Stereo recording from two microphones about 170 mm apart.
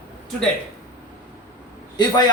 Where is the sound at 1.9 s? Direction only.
25° left (ahead or behind).